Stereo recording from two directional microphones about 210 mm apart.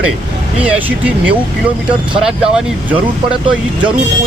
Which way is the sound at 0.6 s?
5° right (ahead or behind).